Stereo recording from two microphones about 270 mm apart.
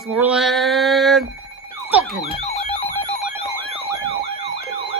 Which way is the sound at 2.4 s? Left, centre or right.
Left.